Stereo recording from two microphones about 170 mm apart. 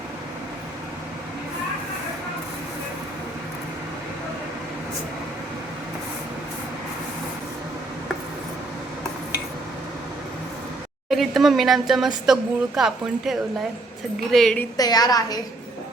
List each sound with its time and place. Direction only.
11.1 s speech: centre (ahead or behind)
14.3 s speech: 5° left (ahead or behind)
14.8 s a woman's voice: 25° left (ahead or behind)